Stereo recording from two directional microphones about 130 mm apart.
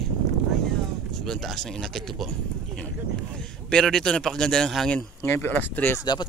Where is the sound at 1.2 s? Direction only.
5° left (ahead or behind).